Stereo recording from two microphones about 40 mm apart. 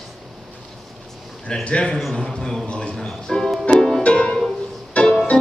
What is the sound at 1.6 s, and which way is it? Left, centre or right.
Speech, left.